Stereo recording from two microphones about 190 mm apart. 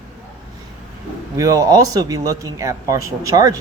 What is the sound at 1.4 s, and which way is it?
Speech, 15° right (ahead or behind).